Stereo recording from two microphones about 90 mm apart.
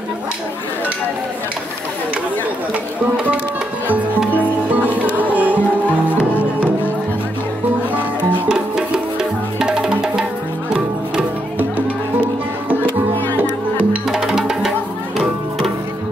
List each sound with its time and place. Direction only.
4.9 s music: 15° right (ahead or behind)
7.9 s music: 10° right (ahead or behind)
14.0 s music: 5° right (ahead or behind)